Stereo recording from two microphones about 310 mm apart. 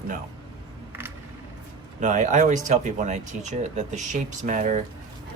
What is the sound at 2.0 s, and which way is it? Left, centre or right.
Speech, right.